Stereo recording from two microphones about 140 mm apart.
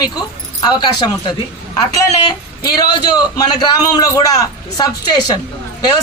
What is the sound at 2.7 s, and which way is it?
A man's voice, 30° left (ahead or behind).